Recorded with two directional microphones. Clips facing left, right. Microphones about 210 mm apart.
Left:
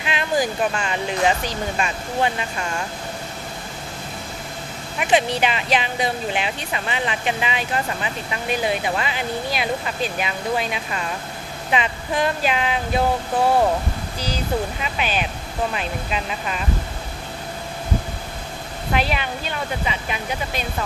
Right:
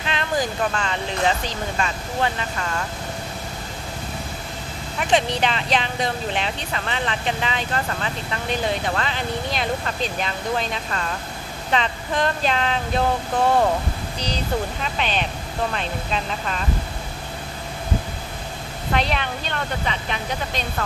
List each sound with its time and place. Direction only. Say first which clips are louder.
0.0 s speech: left 2 dB; 10° left (ahead or behind)
4.9 s speech: left 1 dB; 10° left (ahead or behind)
14.2 s speech: left 1 dB; 5° left (ahead or behind)
18.9 s speech: even; 5° left (ahead or behind)